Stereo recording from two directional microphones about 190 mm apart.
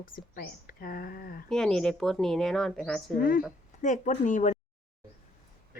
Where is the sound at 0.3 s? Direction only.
55° left (ahead or behind).